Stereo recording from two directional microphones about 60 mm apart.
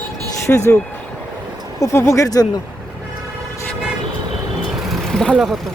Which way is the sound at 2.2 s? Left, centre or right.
Left.